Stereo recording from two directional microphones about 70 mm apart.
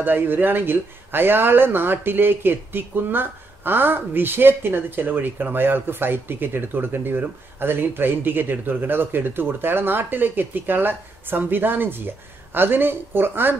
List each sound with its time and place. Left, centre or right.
0.0 s a woman's voice: right